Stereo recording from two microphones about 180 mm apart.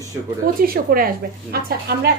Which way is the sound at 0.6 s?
55° right (ahead or behind).